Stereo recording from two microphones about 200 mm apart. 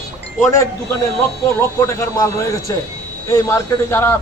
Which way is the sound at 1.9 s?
15° left (ahead or behind).